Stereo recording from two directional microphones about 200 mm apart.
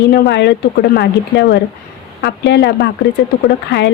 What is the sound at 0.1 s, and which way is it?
Speech, 55° left (ahead or behind).